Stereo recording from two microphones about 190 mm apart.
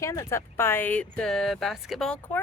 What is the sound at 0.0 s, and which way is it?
Speech, 15° left (ahead or behind).